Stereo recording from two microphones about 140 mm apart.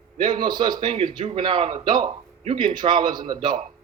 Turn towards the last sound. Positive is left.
turn(degrees=-30)  # may be behind; listen again after turning